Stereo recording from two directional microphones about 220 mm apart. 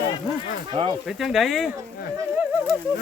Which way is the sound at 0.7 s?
25° right (ahead or behind).